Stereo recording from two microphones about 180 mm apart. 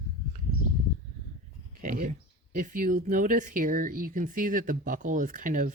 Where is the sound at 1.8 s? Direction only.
55° right (ahead or behind).